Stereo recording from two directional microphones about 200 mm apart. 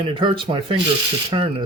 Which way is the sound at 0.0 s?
25° right (ahead or behind).